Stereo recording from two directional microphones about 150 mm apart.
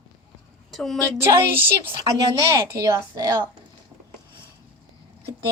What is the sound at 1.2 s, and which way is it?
A woman's voice, 15° right (ahead or behind).